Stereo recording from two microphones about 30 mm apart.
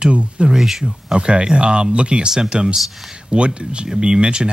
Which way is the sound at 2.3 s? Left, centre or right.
Right.